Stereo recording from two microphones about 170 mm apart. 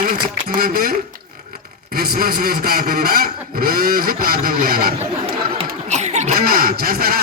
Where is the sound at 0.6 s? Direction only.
60° right (ahead or behind).